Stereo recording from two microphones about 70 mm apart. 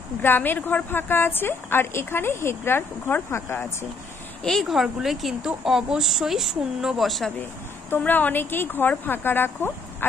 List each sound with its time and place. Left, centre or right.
0.2 s a woman's voice: left
4.4 s a woman's voice: centre
7.1 s a woman's voice: centre
8.0 s speech: left